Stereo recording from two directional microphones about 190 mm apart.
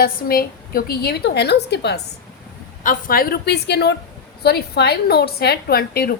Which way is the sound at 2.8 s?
45° left (ahead or behind).